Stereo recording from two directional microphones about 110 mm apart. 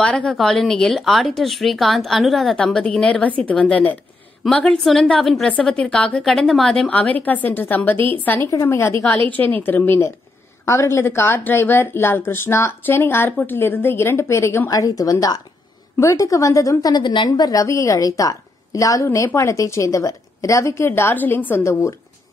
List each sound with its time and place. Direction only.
0.0 s a woman's voice: 10° left (ahead or behind)